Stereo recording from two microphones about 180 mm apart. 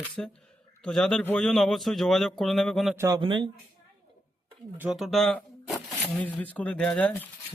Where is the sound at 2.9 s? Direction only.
15° right (ahead or behind).